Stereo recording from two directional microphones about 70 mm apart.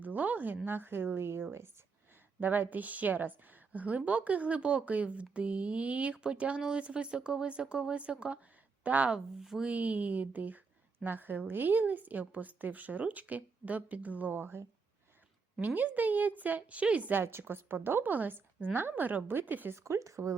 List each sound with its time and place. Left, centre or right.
0.0 s a woman's voice: right
9.1 s speech: centre
9.6 s a woman's voice: centre
15.6 s a woman's voice: right
17.1 s a woman's voice: right
19.7 s a woman's voice: right